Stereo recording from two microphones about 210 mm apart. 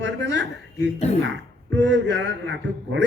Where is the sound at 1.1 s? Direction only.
30° left (ahead or behind).